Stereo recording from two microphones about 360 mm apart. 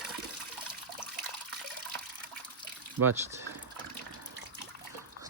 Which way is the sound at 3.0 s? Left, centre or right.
Right.